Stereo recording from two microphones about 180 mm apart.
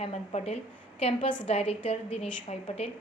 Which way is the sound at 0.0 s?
35° left (ahead or behind).